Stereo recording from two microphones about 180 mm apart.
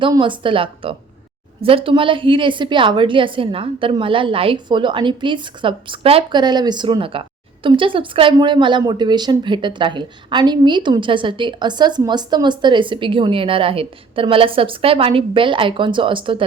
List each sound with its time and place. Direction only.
0.0 s a woman's voice: 25° right (ahead or behind)